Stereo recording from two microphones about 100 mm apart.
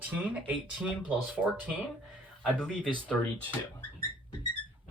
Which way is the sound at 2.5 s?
10° left (ahead or behind).